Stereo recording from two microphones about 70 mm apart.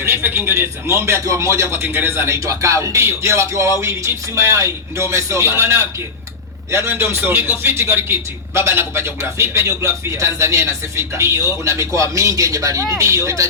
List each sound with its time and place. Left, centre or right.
0.0 s a man's voice: right
1.7 s a man's voice: right